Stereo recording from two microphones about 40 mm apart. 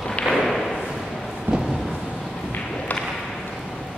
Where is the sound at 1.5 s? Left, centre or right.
Right.